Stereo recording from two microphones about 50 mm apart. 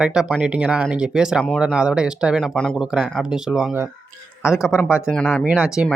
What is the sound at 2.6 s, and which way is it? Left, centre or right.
Speech, centre.